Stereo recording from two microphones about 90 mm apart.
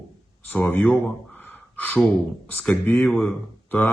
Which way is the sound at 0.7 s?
20° left (ahead or behind).